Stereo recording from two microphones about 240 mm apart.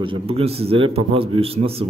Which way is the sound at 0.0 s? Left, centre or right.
Right.